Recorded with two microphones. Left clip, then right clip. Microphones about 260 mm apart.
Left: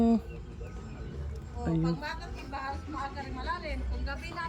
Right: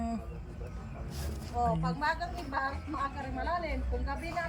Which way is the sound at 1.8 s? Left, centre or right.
Centre.